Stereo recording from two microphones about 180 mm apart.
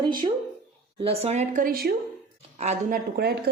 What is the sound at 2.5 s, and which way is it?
Speech, 40° right (ahead or behind).